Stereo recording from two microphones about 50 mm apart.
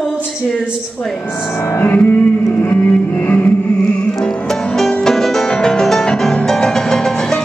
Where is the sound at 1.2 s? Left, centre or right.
Left.